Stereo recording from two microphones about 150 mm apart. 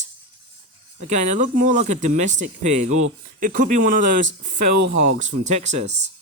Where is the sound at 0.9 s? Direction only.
50° right (ahead or behind).